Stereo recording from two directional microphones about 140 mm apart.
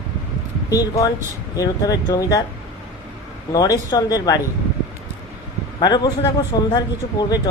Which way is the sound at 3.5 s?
25° left (ahead or behind).